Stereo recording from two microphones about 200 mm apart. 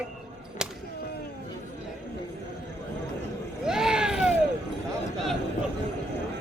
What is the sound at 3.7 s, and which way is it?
Vehicle, 5° right (ahead or behind).